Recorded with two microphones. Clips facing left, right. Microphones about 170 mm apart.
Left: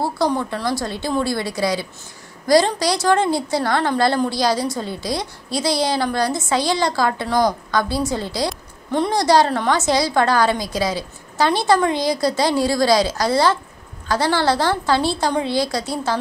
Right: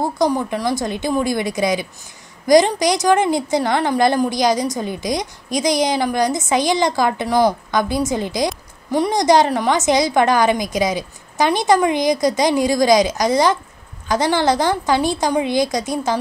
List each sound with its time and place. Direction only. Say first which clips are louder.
0.0 s a woman's voice: right 2 dB; 15° right (ahead or behind)